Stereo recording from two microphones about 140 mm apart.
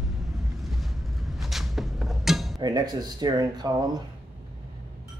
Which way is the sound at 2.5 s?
30° right (ahead or behind).